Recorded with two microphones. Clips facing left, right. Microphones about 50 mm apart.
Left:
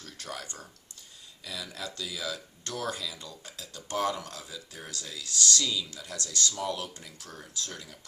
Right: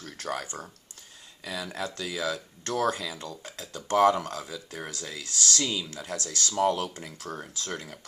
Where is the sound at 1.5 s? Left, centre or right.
Right.